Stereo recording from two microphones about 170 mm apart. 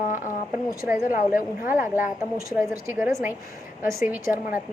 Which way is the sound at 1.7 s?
10° right (ahead or behind).